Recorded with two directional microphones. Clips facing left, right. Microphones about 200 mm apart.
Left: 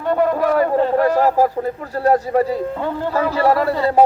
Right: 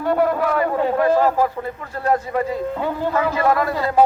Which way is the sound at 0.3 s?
40° left (ahead or behind).